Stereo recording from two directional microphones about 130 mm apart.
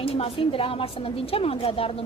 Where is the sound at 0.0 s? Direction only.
45° left (ahead or behind).